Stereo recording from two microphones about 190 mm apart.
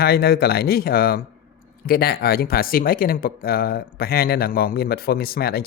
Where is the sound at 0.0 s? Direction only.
55° left (ahead or behind).